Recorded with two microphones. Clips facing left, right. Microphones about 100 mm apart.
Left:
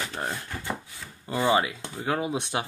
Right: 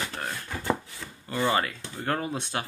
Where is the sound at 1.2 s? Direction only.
15° left (ahead or behind).